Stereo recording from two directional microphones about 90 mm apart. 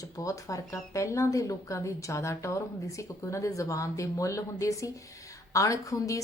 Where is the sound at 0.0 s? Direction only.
40° left (ahead or behind).